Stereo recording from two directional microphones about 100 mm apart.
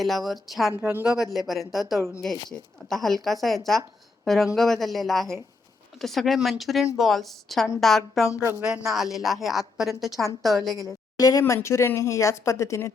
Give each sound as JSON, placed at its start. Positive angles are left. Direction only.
{"t": 0.0, "sound": "speech", "side_deg": 0}
{"t": 8.3, "sound": "speech", "side_deg": 30}
{"t": 8.9, "sound": "speech", "side_deg": -5}
{"t": 11.2, "sound": "speech", "side_deg": 35}